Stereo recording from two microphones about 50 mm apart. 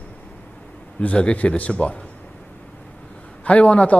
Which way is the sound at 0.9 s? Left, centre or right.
Left.